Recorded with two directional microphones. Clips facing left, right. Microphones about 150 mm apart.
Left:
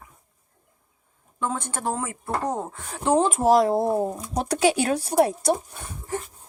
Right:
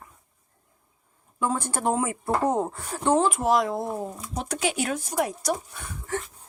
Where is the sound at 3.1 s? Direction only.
25° left (ahead or behind).